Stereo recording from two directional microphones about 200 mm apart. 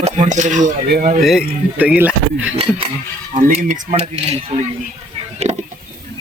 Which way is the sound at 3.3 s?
35° right (ahead or behind).